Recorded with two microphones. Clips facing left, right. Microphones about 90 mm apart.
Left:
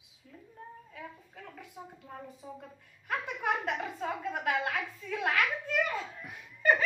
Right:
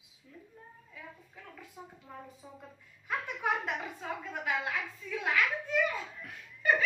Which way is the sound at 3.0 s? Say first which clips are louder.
Left 1 dB; 65° left (ahead or behind).